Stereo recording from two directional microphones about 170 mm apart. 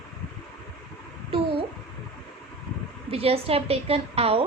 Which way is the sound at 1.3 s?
35° right (ahead or behind).